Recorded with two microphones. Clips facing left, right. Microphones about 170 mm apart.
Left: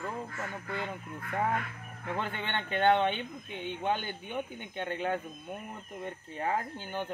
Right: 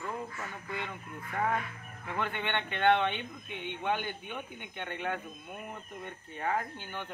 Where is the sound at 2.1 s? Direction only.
35° left (ahead or behind).